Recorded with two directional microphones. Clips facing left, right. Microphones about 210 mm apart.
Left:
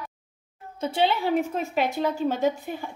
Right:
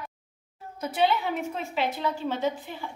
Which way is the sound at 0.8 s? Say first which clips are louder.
Left 1 dB; 30° left (ahead or behind).